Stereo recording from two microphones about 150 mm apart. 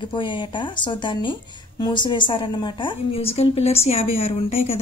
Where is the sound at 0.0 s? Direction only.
30° left (ahead or behind).